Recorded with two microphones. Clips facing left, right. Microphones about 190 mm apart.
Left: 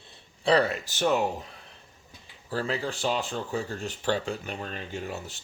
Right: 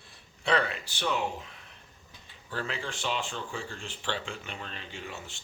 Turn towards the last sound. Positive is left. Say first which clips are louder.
# left 7 dB
turn(degrees=40)  # may be behind; listen again after turning